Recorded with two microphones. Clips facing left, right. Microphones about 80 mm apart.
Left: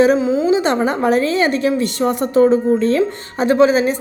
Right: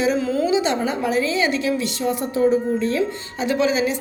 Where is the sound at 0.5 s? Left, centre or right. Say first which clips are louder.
Left 4 dB; left.